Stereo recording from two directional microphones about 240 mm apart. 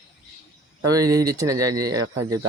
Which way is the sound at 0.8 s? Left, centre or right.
Centre.